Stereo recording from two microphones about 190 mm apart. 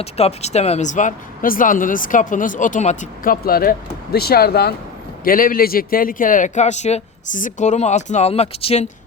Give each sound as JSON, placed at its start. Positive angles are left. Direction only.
{"t": 0.0, "sound": "a man's voice", "side_deg": 35}